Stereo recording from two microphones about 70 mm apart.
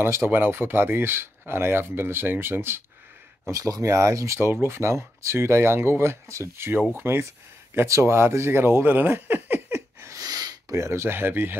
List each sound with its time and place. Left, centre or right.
0.0 s speech: right
3.4 s speech: right
4.5 s speech: right
9.8 s a sound: right
10.1 s a sound: right
10.8 s speech: right